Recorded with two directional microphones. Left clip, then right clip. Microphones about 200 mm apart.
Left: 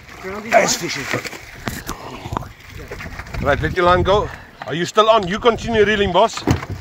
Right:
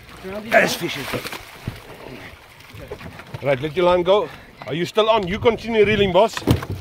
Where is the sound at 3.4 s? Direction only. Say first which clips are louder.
Left 3 dB; 10° left (ahead or behind).